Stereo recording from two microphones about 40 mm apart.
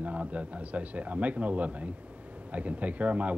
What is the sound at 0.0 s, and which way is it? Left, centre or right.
Speech, right.